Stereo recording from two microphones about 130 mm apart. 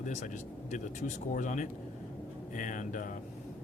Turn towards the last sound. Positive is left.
turn(degrees=80)